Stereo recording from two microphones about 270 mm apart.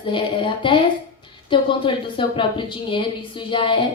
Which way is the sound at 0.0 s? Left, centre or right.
Centre.